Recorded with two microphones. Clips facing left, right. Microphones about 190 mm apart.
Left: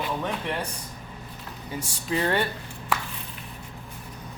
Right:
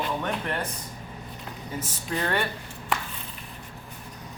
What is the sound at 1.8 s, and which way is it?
Speech, 10° left (ahead or behind).